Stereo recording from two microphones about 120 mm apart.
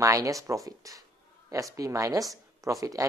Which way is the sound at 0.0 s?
25° right (ahead or behind).